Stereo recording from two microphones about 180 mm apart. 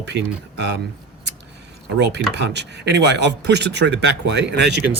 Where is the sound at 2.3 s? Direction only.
75° right (ahead or behind).